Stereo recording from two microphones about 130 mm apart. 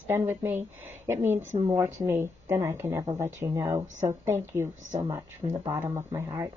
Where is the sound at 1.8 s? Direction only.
15° right (ahead or behind).